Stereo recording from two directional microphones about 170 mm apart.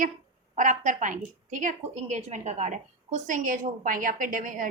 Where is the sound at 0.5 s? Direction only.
50° right (ahead or behind).